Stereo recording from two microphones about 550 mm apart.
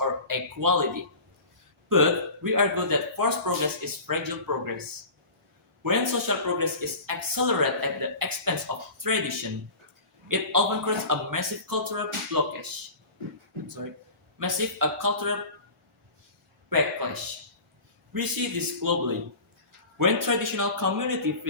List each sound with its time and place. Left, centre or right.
0.0 s a sound: right
1.9 s speech: right
5.8 s speech: right
14.3 s speech: right
16.6 s speech: right